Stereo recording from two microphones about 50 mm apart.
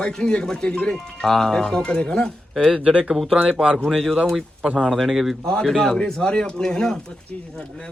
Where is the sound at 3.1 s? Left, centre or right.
Centre.